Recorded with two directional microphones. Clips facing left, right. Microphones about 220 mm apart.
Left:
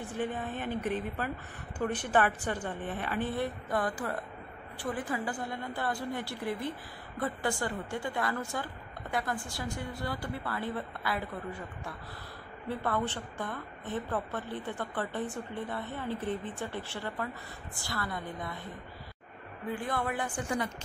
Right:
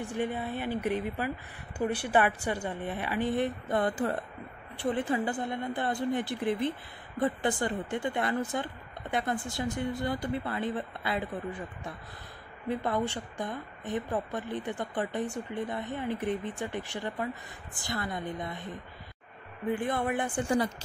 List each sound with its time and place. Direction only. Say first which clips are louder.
0.1 s a woman's voice: right 1 dB; 10° right (ahead or behind)
12.6 s a woman's voice: right 2 dB; 15° right (ahead or behind)
19.7 s a woman's voice: right 4 dB; 20° right (ahead or behind)